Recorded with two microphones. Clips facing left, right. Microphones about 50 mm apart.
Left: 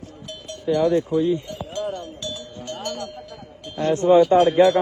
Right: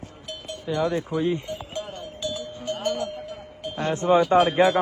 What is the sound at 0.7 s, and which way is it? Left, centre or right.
Speech, centre.